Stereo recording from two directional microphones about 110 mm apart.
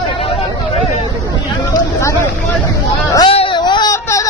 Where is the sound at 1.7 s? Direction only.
25° left (ahead or behind).